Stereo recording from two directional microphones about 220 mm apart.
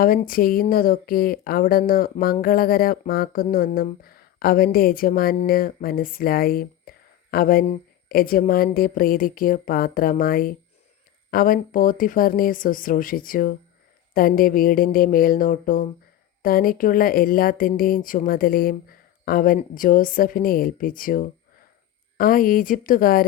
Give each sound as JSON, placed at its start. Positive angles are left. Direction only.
{"t": 0.0, "sound": "speech", "side_deg": 40}